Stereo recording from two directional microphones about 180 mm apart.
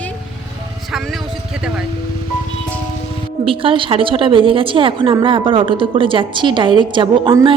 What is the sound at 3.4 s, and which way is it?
A woman's voice, 30° right (ahead or behind).